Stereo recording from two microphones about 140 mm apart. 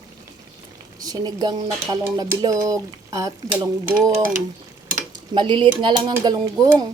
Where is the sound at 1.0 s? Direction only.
30° right (ahead or behind).